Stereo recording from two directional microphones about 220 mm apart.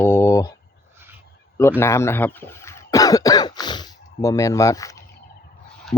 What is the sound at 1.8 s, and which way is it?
Speech, 10° left (ahead or behind).